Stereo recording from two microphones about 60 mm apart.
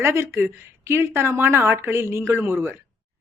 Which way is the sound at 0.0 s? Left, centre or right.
Right.